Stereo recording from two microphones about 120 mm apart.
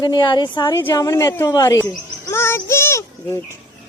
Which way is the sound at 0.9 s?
25° left (ahead or behind).